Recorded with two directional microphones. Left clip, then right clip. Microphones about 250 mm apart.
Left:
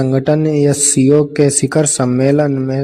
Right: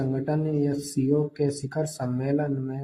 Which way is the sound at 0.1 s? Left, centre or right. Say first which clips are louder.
Left 14 dB; left.